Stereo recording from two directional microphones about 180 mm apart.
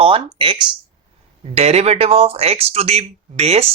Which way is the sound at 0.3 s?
25° right (ahead or behind).